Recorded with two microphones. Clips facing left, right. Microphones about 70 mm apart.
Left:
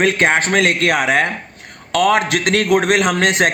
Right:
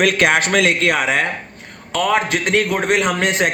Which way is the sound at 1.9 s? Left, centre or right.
Left.